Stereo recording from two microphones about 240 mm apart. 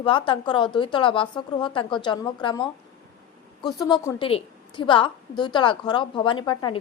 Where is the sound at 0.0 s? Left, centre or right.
Left.